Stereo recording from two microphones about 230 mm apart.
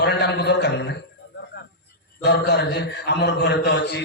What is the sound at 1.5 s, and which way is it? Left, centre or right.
Music, left.